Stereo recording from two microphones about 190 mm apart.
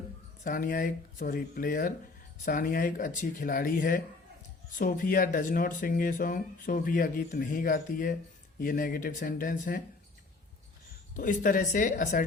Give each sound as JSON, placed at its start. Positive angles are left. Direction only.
{"t": 0.4, "sound": "speech", "side_deg": 45}
{"t": 11.2, "sound": "speech", "side_deg": 45}